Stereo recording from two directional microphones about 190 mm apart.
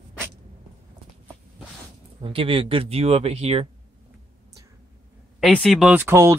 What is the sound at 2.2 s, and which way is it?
Speech, 30° right (ahead or behind).